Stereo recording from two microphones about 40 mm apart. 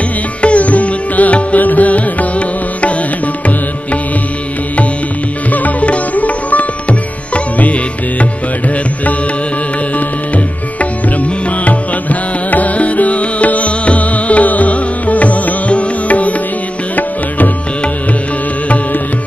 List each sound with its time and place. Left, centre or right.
0.4 s music: left
5.5 s sitar: left
9.9 s music: left